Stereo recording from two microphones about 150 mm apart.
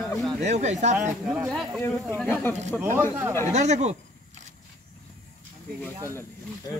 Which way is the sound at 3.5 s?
50° right (ahead or behind).